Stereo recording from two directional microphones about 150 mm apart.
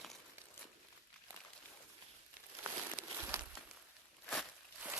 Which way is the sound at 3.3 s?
20° right (ahead or behind).